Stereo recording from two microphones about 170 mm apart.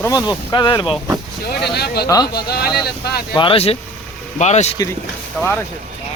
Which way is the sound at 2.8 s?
70° left (ahead or behind).